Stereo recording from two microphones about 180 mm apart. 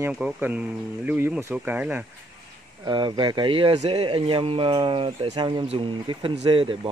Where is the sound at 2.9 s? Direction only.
25° right (ahead or behind).